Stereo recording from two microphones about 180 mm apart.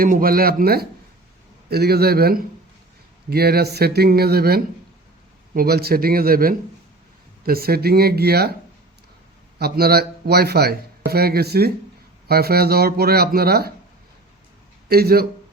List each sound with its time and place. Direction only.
0.0 s speech: 55° right (ahead or behind)
9.6 s speech: 60° right (ahead or behind)
14.8 s speech: 60° right (ahead or behind)